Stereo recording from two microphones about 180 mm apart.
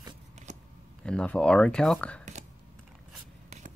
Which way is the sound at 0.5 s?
40° right (ahead or behind).